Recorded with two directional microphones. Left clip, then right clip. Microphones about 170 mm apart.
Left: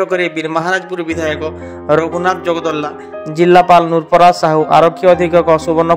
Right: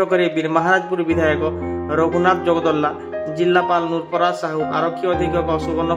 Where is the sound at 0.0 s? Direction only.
35° left (ahead or behind).